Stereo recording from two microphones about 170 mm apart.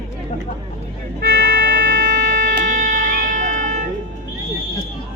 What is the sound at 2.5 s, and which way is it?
Music, 50° right (ahead or behind).